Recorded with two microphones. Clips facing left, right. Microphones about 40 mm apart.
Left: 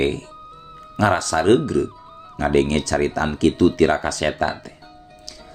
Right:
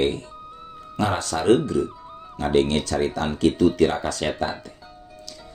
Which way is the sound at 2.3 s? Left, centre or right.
Left.